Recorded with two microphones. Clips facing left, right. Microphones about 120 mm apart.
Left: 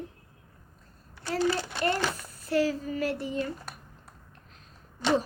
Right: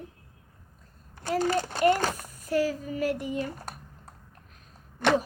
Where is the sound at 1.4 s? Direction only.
45° right (ahead or behind).